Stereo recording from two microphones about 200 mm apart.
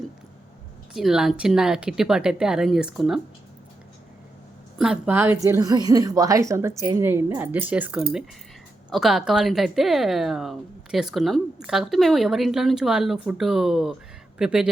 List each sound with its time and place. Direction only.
0.9 s a woman's voice: centre (ahead or behind)
4.8 s a woman's voice: 5° right (ahead or behind)